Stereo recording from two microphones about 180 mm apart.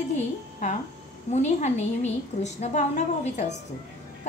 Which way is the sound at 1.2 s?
40° left (ahead or behind).